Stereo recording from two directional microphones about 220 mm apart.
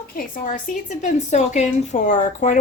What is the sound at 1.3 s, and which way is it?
Speech, 30° left (ahead or behind).